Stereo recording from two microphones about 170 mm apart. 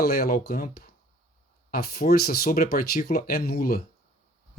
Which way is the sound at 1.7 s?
60° left (ahead or behind).